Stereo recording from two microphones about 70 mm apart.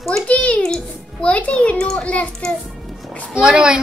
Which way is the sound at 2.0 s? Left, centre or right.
Centre.